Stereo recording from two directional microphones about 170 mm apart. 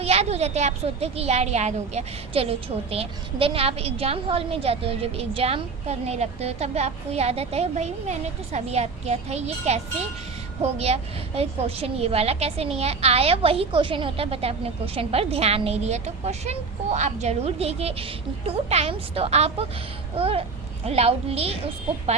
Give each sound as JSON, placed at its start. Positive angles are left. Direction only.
{"t": 0.0, "sound": "a woman's voice", "side_deg": -40}